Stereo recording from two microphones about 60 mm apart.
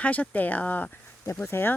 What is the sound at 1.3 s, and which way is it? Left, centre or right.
Speech, left.